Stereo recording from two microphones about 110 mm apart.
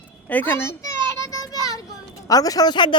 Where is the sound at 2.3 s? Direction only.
35° left (ahead or behind).